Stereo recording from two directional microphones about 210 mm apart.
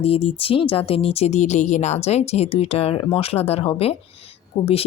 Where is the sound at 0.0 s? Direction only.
25° left (ahead or behind).